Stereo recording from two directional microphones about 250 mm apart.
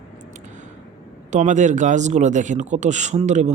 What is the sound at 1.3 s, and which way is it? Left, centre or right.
A man's voice, right.